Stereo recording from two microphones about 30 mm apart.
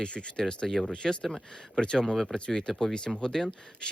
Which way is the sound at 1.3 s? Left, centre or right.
Centre.